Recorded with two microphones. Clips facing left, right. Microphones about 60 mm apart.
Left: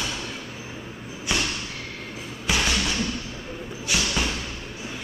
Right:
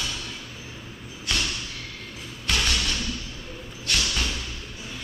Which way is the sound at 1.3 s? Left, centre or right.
Centre.